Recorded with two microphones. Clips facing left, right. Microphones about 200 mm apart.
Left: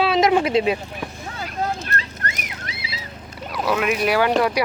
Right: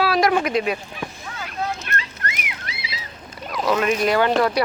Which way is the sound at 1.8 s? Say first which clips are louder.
Left 1 dB; 40° left (ahead or behind).